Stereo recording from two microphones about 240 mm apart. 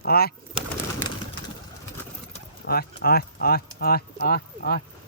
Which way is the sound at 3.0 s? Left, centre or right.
Left.